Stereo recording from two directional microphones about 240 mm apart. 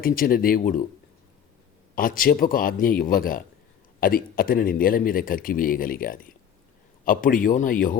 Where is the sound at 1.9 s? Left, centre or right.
Left.